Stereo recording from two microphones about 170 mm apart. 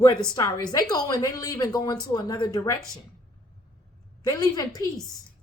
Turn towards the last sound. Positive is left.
turn(degrees=20)  # may be behind; listen again after turning